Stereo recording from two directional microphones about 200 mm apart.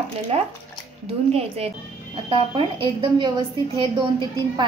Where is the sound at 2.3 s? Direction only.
25° right (ahead or behind).